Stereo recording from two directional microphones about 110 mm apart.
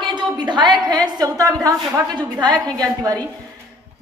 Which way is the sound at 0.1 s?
45° right (ahead or behind).